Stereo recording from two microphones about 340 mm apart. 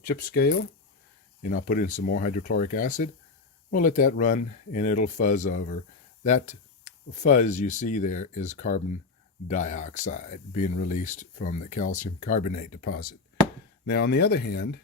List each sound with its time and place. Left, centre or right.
0.0 s speech: left